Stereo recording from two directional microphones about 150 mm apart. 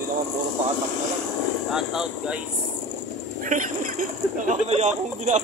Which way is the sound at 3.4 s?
60° right (ahead or behind).